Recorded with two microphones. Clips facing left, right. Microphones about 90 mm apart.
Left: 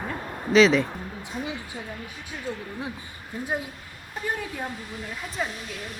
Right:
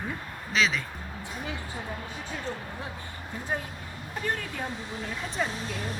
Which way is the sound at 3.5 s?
10° left (ahead or behind).